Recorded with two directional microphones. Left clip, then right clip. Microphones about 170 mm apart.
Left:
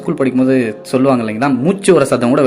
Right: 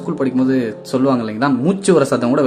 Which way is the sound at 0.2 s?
10° left (ahead or behind).